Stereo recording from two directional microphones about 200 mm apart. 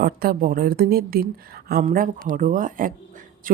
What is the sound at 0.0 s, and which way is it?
A woman's voice, 50° right (ahead or behind).